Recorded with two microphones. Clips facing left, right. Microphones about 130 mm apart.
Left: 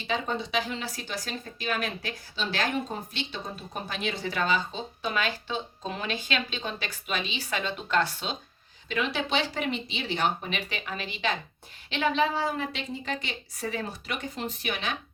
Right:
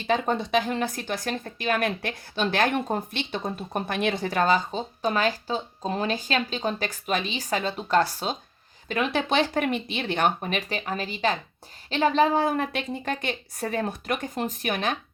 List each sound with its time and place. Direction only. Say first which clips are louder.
0.1 s speech: right 6 dB; 50° right (ahead or behind)